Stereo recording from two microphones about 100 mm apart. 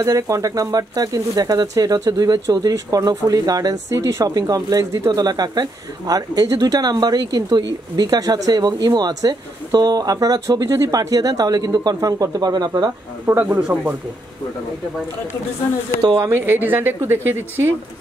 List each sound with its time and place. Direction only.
0.0 s speech: 35° right (ahead or behind)
13.2 s speech: 25° right (ahead or behind)
13.6 s speech: 10° right (ahead or behind)
16.2 s speech: 25° right (ahead or behind)